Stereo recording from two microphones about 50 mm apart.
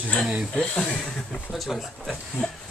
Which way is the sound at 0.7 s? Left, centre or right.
Centre.